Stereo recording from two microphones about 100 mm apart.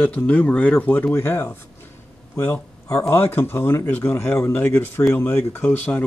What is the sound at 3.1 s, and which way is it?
Speech, 25° left (ahead or behind).